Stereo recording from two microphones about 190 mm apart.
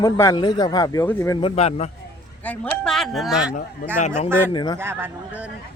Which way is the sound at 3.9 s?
40° left (ahead or behind).